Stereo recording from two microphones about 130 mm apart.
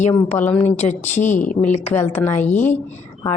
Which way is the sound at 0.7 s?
65° left (ahead or behind).